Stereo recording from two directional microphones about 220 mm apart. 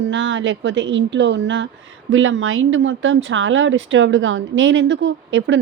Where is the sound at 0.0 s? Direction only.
55° right (ahead or behind).